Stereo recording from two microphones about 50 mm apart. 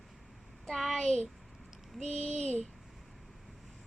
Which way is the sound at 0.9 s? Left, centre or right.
Centre.